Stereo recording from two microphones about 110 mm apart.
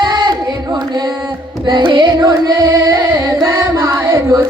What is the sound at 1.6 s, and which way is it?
Carnatic music, 45° right (ahead or behind).